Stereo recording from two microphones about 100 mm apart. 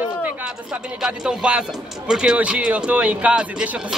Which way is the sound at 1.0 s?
10° right (ahead or behind).